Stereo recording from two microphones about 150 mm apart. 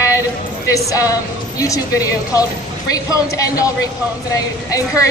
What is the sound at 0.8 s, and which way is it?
A woman's voice, 20° left (ahead or behind).